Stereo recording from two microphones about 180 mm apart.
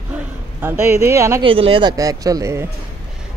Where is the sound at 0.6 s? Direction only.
15° right (ahead or behind).